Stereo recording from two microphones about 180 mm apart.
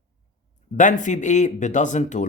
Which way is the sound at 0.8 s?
45° left (ahead or behind).